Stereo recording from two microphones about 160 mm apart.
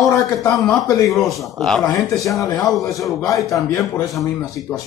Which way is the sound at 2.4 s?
25° left (ahead or behind).